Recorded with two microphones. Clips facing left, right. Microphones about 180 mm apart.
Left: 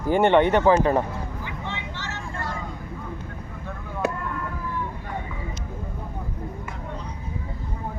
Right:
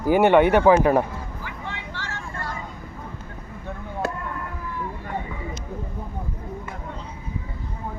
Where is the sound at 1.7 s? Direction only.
20° left (ahead or behind).